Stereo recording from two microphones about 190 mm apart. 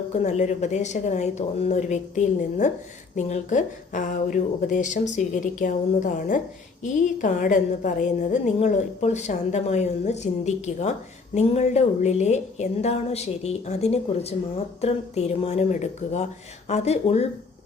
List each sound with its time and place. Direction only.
0.1 s a woman's voice: 40° left (ahead or behind)